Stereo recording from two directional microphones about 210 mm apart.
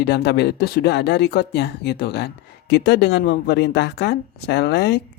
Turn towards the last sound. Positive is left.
turn(degrees=55)  # may be behind; listen again after turning